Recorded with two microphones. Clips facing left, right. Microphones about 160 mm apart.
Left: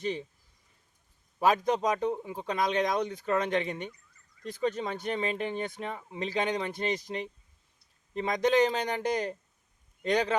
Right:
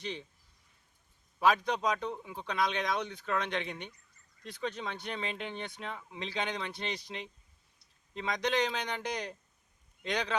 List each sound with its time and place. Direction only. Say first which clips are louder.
1.4 s speech: left 3 dB; 45° left (ahead or behind)